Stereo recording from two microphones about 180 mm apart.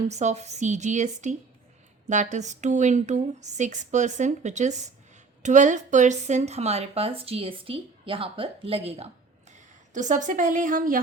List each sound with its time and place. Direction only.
0.1 s a woman's voice: 40° right (ahead or behind)
9.9 s a woman's voice: 45° right (ahead or behind)